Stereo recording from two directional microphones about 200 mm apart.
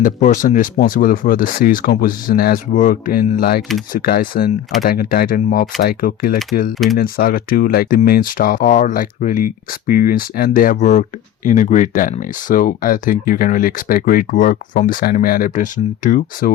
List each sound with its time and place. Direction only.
0.0 s speech: 40° left (ahead or behind)